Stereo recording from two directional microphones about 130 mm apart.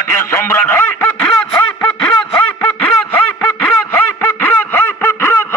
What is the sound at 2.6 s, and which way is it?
Quack, 10° left (ahead or behind).